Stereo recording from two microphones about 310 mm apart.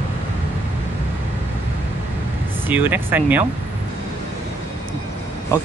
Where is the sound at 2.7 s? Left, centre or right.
Centre.